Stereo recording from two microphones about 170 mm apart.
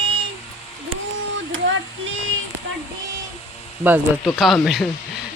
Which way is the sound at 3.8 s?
10° right (ahead or behind).